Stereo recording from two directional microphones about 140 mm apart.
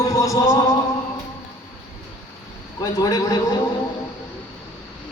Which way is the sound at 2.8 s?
25° left (ahead or behind).